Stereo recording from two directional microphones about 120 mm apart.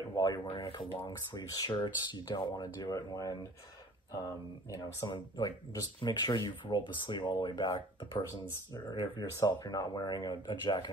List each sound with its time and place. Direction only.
0.1 s a sound: 30° left (ahead or behind)
0.5 s speech: 40° left (ahead or behind)
5.1 s speech: 35° left (ahead or behind)